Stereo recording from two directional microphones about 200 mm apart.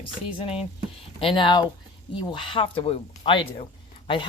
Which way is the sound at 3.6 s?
25° left (ahead or behind).